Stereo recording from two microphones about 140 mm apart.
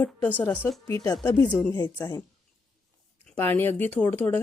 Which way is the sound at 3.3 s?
15° left (ahead or behind).